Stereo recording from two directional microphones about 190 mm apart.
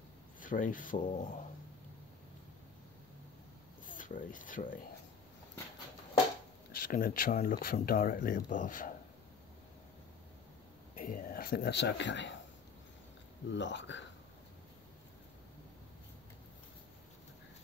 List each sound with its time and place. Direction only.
0.4 s speech: 45° left (ahead or behind)
3.8 s speech: 45° left (ahead or behind)
6.7 s speech: 45° left (ahead or behind)
11.0 s a man's voice: 45° left (ahead or behind); by 12.4 s 70° left (ahead or behind)
13.5 s speech: 70° left (ahead or behind)